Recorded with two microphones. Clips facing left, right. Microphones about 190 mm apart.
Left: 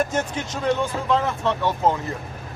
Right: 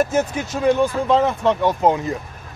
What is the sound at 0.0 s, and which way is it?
Speech, 5° right (ahead or behind).